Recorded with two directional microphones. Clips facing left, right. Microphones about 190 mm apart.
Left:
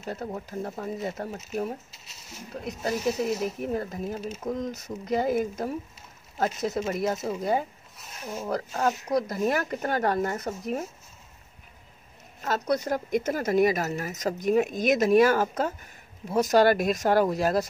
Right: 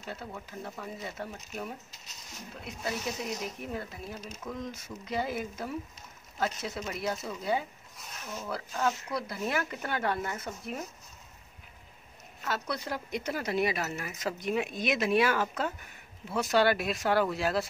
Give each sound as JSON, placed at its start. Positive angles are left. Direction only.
{"t": 0.0, "sound": "speech", "side_deg": 40}
{"t": 12.4, "sound": "speech", "side_deg": 45}